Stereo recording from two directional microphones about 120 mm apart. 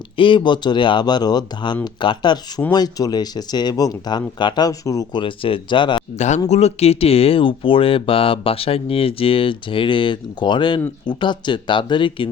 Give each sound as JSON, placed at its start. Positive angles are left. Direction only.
{"t": 0.2, "sound": "speech", "side_deg": 45}
{"t": 5.2, "sound": "speech", "side_deg": 45}
{"t": 6.1, "sound": "speech", "side_deg": 75}
{"t": 6.5, "sound": "speech", "side_deg": 60}